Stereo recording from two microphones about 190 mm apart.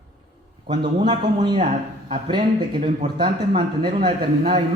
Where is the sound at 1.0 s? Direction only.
25° right (ahead or behind).